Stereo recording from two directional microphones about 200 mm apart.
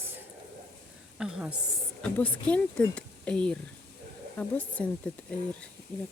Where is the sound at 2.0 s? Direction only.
5° left (ahead or behind).